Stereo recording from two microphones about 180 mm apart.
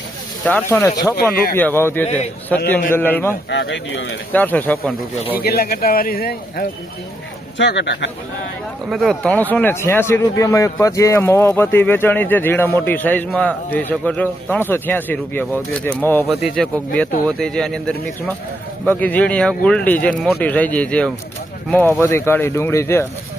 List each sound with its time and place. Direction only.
0.4 s speech: 10° left (ahead or behind)
3.5 s speech: 75° left (ahead or behind)
4.3 s speech: 10° left (ahead or behind)
5.4 s a man's voice: 60° left (ahead or behind)
7.6 s speech: 70° left (ahead or behind)
8.9 s a man's voice: centre (ahead or behind)